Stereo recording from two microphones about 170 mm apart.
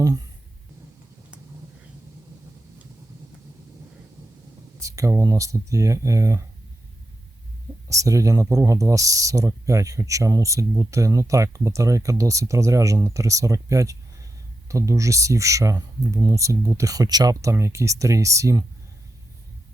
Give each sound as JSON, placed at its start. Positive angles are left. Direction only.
{"t": 4.8, "sound": "speech", "side_deg": -20}
{"t": 7.9, "sound": "speech", "side_deg": -20}